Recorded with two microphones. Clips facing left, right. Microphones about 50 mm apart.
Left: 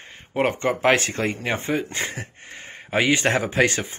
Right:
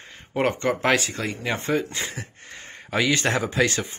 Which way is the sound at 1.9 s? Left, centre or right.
Left.